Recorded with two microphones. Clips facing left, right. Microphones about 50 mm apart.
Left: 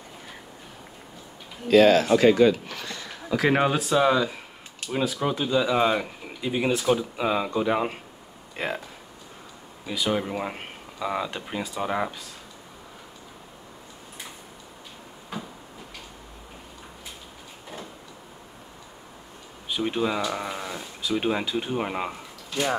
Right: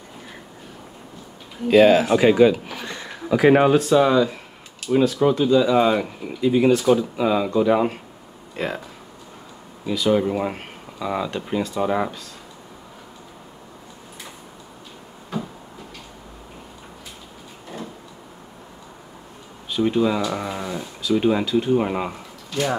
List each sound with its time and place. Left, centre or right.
1.7 s speech: centre
2.9 s a sound: right
3.3 s speech: centre
3.7 s speech: centre
9.8 s speech: centre
11.7 s speech: centre
15.3 s cupboard open or close: centre
19.7 s speech: centre
20.2 s speech: centre
21.2 s speech: centre